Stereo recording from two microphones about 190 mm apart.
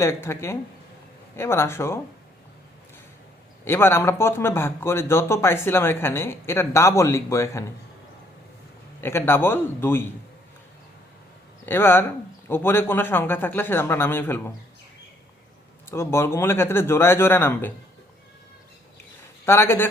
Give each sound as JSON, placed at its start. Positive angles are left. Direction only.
{"t": 0.0, "sound": "speech", "side_deg": 15}
{"t": 3.6, "sound": "speech", "side_deg": 10}
{"t": 9.0, "sound": "speech", "side_deg": 10}
{"t": 11.6, "sound": "speech", "side_deg": 10}
{"t": 15.9, "sound": "speech", "side_deg": 15}
{"t": 19.5, "sound": "speech", "side_deg": 15}